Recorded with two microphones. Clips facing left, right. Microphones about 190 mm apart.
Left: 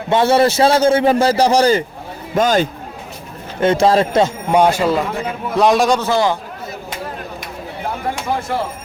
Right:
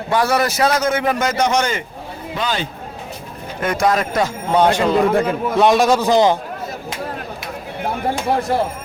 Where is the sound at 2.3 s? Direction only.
45° left (ahead or behind).